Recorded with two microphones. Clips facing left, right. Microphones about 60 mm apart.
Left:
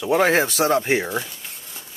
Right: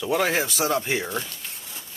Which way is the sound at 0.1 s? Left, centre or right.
Left.